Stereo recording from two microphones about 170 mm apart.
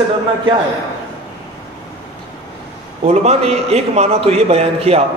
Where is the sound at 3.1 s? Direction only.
40° right (ahead or behind).